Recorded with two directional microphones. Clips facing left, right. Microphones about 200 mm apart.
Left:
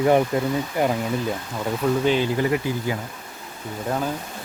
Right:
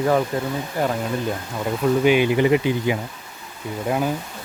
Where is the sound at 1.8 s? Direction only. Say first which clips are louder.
Right 4 dB; 15° right (ahead or behind).